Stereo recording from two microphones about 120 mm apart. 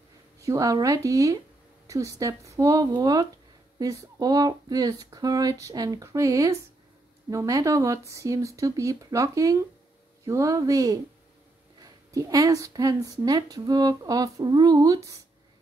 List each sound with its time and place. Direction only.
0.4 s a woman's voice: 25° right (ahead or behind)